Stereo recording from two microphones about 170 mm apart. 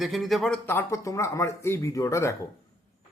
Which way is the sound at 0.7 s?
15° left (ahead or behind).